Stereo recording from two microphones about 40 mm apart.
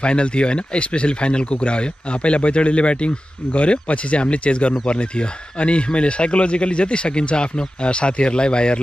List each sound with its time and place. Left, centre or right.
0.0 s speech: left